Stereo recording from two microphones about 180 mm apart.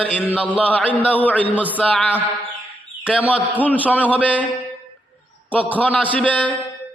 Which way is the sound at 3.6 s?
10° left (ahead or behind).